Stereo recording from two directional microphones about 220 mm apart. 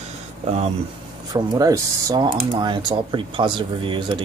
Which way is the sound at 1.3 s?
15° right (ahead or behind).